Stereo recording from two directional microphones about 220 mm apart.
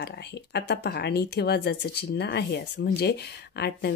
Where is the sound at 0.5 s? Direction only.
50° left (ahead or behind).